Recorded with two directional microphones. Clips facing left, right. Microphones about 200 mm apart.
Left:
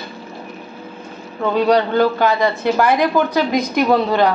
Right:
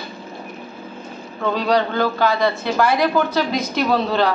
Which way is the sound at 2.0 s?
15° left (ahead or behind).